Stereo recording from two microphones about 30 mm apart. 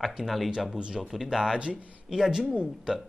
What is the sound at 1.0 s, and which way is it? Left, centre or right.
Speech, centre.